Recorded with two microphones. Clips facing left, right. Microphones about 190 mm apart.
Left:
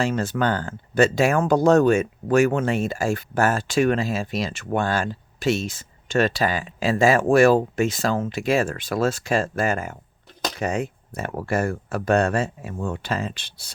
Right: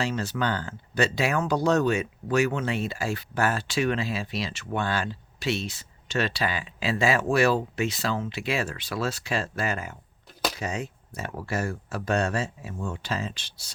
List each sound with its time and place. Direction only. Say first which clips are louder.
0.0 s speech: left 5 dB; 50° left (ahead or behind)